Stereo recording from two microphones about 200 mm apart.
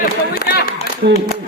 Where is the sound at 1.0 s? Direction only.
50° right (ahead or behind).